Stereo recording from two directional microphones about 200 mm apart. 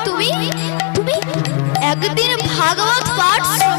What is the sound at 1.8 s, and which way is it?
Music, 15° left (ahead or behind).